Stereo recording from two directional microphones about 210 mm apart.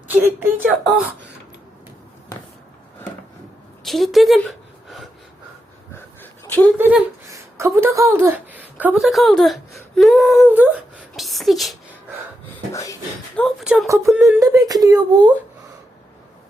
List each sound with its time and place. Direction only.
0.1 s speech: 10° right (ahead or behind)
3.8 s a woman's voice: centre (ahead or behind)
6.4 s a sound: 10° left (ahead or behind)
6.7 s speech: 10° right (ahead or behind)
11.2 s a sound: centre (ahead or behind)
12.7 s a sound: 15° left (ahead or behind)
13.4 s speech: centre (ahead or behind)
13.8 s speech: 15° right (ahead or behind)
14.1 s speech: centre (ahead or behind)
14.3 s speech: 15° right (ahead or behind)